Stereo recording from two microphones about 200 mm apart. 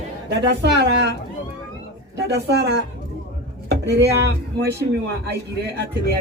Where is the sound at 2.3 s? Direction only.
55° right (ahead or behind).